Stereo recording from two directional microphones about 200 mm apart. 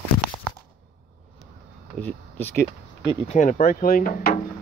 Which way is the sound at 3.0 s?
35° left (ahead or behind).